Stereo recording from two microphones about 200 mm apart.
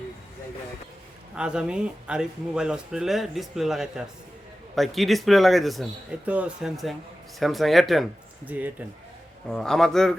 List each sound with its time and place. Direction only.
1.4 s speech: 5° right (ahead or behind)